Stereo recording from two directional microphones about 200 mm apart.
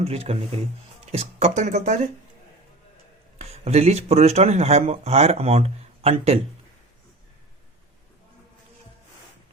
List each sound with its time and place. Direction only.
0.0 s speech: 30° right (ahead or behind)
3.3 s speech: 30° right (ahead or behind)